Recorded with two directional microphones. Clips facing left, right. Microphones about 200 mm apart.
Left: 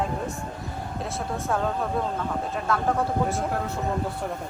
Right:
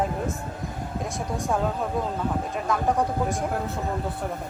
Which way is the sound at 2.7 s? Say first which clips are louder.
Right 1 dB; 15° right (ahead or behind).